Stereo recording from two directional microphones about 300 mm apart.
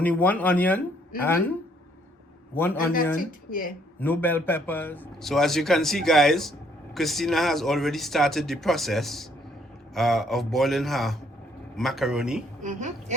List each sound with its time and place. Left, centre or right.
0.0 s a man's voice: centre
3.2 s speech: left
4.0 s a man's voice: centre
12.6 s a woman's voice: right